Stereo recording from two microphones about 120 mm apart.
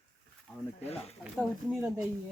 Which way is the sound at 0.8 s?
60° left (ahead or behind).